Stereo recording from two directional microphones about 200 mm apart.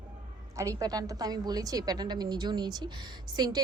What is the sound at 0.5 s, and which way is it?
A woman's voice, 15° right (ahead or behind).